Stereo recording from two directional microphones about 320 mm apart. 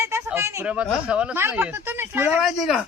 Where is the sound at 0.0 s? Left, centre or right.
Centre.